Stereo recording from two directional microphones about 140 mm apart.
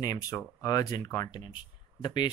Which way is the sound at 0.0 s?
25° left (ahead or behind).